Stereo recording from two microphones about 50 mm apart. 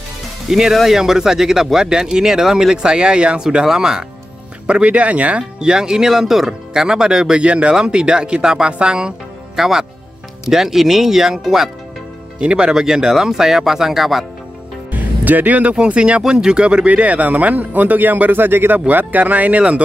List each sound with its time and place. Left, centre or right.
0.5 s speech: centre
4.8 s speech: right
7.3 s speech: right; by 11.7 s centre
12.4 s speech: right
14.9 s music: right
15.7 s speech: right